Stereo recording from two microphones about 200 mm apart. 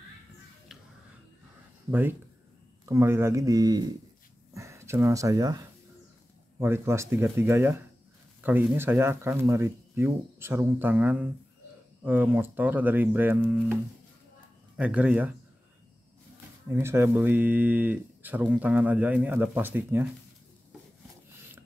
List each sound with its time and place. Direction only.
1.9 s speech: 10° right (ahead or behind)
14.8 s speech: 5° right (ahead or behind)
16.7 s speech: 10° right (ahead or behind)